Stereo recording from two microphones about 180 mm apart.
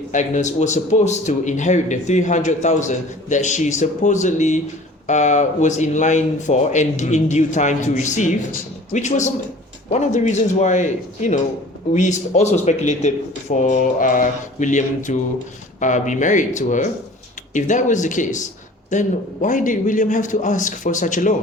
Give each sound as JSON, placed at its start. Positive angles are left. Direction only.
{"t": 0.1, "sound": "a man's voice", "side_deg": 40}